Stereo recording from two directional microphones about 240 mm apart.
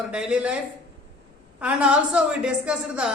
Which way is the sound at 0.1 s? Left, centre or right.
Centre.